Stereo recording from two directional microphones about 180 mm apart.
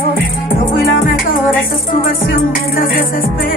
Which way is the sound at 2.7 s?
50° left (ahead or behind).